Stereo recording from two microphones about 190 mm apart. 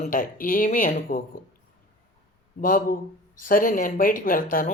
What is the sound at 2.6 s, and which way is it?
Speech, 45° left (ahead or behind).